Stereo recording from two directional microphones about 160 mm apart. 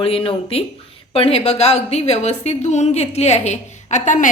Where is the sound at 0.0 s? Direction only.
35° left (ahead or behind).